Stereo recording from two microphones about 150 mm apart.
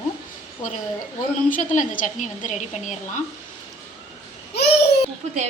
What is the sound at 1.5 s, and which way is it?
A woman's voice, 60° left (ahead or behind).